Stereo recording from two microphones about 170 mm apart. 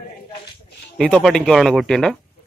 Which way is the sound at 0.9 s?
5° left (ahead or behind).